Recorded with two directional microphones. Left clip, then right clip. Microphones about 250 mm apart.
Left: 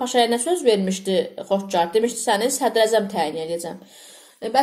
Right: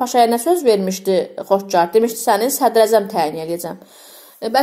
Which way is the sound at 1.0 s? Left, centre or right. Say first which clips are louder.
Right 5 dB; right.